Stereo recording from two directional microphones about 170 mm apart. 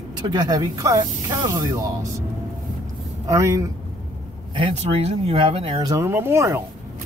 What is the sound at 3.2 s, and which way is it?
Speech, 20° right (ahead or behind).